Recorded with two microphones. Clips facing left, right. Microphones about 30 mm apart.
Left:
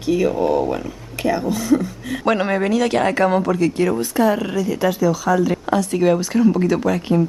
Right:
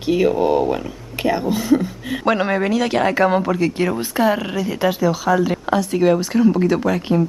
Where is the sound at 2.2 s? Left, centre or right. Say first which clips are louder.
Even; centre.